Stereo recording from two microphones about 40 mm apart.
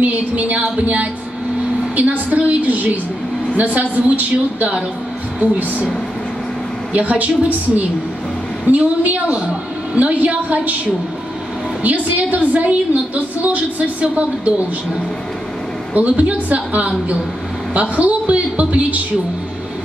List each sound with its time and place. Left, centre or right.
0.0 s a woman's voice: right
2.0 s a sound: right
3.5 s a woman's voice: right
6.9 s a woman's voice: right
11.8 s a woman's voice: right
15.9 s a woman's voice: right